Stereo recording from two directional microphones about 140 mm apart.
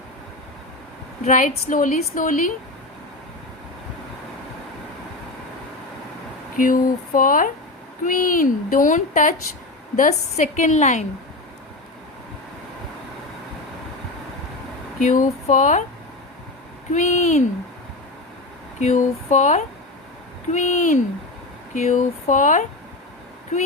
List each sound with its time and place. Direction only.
1.2 s a woman's voice: 65° left (ahead or behind)
6.6 s a woman's voice: 75° left (ahead or behind); by 11.0 s 55° left (ahead or behind)
14.9 s a woman's voice: 65° left (ahead or behind)
16.9 s a woman's voice: 60° left (ahead or behind)
18.8 s a woman's voice: 60° left (ahead or behind)